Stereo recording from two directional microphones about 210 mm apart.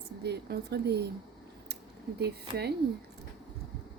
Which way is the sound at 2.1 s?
50° right (ahead or behind).